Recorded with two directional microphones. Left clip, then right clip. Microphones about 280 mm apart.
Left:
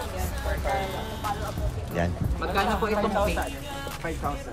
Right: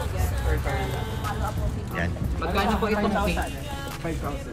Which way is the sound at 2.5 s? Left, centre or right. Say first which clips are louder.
Even; centre.